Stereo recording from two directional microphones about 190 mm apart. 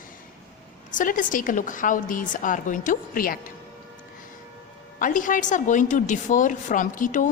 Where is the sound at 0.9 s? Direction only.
45° left (ahead or behind).